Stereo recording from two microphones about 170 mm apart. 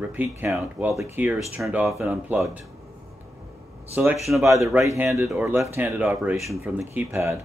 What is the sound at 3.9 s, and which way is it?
Speech, 10° right (ahead or behind).